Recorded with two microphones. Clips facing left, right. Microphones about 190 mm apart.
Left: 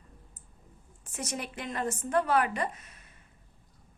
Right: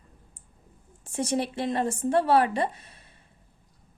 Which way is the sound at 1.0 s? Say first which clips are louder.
Right 10 dB; 30° right (ahead or behind).